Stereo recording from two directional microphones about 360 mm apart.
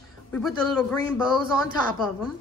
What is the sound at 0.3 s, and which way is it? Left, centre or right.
Speech, centre.